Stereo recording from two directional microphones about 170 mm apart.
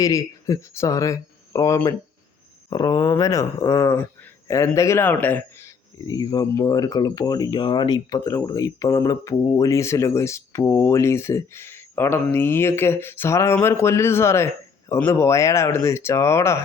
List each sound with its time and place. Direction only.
0.0 s speech: 20° left (ahead or behind)